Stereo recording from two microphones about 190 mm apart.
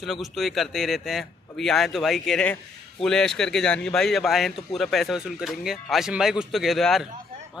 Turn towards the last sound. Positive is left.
turn(degrees=0)  # may be behind; listen again after turning